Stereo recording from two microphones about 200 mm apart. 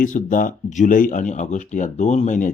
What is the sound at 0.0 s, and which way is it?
A man's voice, 40° left (ahead or behind).